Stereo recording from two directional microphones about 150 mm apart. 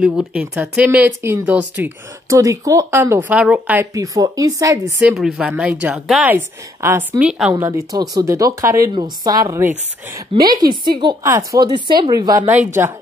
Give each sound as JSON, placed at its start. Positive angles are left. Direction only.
{"t": 0.0, "sound": "speech", "side_deg": -5}
{"t": 2.2, "sound": "speech", "side_deg": -20}
{"t": 3.9, "sound": "speech", "side_deg": -25}
{"t": 5.1, "sound": "speech", "side_deg": 0}
{"t": 6.3, "sound": "speech", "side_deg": -15}
{"t": 7.2, "sound": "speech", "side_deg": -5}
{"t": 7.6, "sound": "speech", "side_deg": -20}
{"t": 10.4, "sound": "a woman's voice", "side_deg": -75}
{"t": 10.7, "sound": "a woman's voice", "side_deg": -30}
{"t": 11.2, "sound": "speech", "side_deg": -20}